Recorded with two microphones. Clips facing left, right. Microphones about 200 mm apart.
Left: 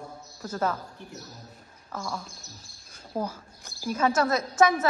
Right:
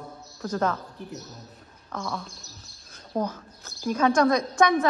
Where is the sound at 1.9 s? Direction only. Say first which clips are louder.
Right 2 dB; 5° left (ahead or behind).